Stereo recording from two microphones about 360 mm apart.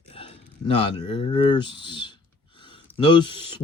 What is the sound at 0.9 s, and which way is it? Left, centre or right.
Speech, centre.